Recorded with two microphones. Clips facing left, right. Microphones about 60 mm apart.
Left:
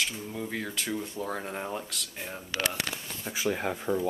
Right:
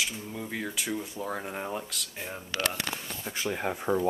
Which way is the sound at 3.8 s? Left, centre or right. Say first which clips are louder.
Right 3 dB; right.